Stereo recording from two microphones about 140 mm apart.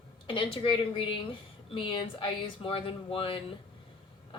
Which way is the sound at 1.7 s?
35° left (ahead or behind).